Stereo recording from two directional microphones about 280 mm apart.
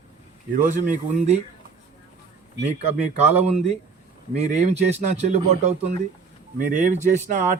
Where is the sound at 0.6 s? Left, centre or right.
Right.